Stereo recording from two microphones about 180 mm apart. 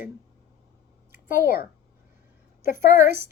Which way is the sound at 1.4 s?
55° left (ahead or behind).